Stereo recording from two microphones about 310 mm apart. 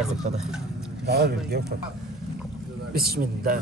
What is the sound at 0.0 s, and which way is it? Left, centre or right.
Speech, centre.